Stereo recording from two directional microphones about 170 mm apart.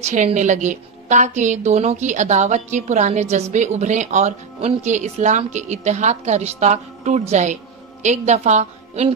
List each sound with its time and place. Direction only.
0.1 s a woman's voice: 45° right (ahead or behind)